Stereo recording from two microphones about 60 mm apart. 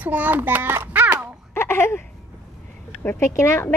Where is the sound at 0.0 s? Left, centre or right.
Right.